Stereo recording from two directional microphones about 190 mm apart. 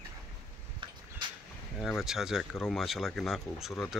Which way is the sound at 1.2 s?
25° right (ahead or behind).